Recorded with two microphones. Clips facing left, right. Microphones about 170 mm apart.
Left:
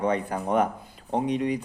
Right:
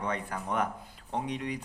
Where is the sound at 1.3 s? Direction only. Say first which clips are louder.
Left 9 dB; 20° left (ahead or behind).